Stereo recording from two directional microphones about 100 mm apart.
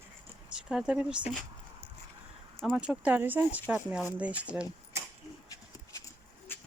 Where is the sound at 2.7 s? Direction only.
10° right (ahead or behind).